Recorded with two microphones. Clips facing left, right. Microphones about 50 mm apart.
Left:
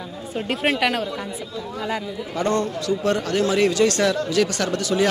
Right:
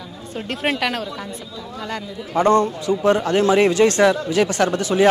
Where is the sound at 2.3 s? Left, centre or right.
Right.